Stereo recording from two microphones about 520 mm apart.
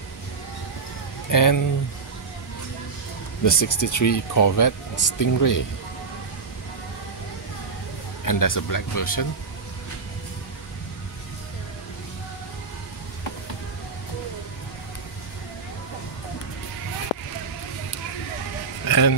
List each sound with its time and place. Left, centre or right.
1.3 s speech: left
3.4 s speech: left
8.3 s speech: left
18.9 s music: left